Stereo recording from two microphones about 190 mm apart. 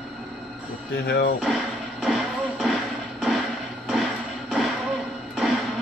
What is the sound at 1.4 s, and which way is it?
Music, 5° right (ahead or behind).